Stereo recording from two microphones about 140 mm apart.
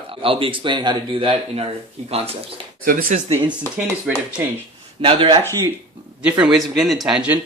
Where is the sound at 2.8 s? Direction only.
85° right.